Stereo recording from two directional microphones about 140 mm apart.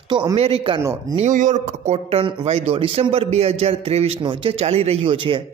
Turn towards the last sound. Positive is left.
turn(degrees=-40)  # may be behind; listen again after turning